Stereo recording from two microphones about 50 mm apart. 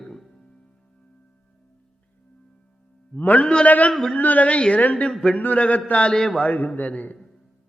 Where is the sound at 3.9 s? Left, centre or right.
Centre.